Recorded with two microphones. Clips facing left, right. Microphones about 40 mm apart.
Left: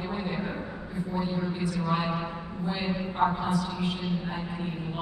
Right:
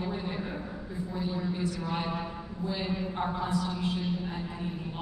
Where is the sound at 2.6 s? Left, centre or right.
Left.